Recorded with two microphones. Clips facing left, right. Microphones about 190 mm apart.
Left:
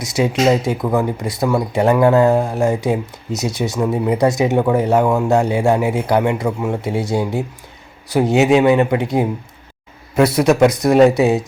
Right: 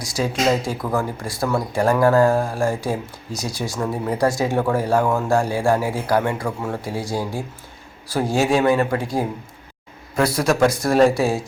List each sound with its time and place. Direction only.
0.0 s speech: 20° left (ahead or behind)